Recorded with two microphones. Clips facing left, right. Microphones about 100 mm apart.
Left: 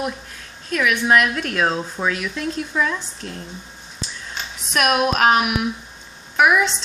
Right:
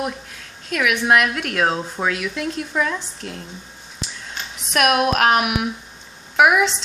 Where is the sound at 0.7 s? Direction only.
60° right (ahead or behind).